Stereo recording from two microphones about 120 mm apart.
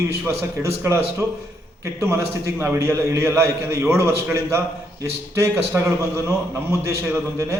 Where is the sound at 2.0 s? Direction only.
20° right (ahead or behind).